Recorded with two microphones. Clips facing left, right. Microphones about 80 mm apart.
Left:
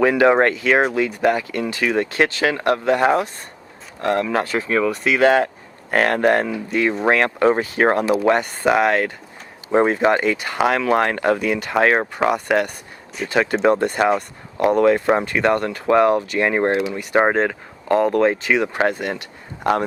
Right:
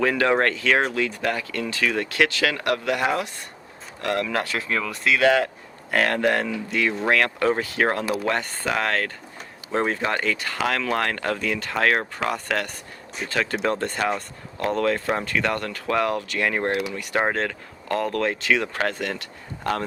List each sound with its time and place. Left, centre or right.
0.0 s speech: left
4.9 s speech: left